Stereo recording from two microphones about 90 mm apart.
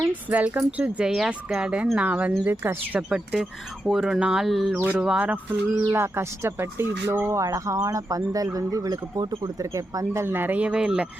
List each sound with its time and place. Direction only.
0.1 s speech: 15° right (ahead or behind)
3.8 s speech: 10° right (ahead or behind)
4.7 s speech: 15° right (ahead or behind)
5.9 s speech: 30° right (ahead or behind); by 11.1 s 10° right (ahead or behind)